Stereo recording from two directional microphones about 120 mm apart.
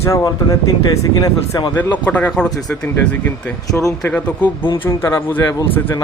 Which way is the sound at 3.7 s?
30° left (ahead or behind).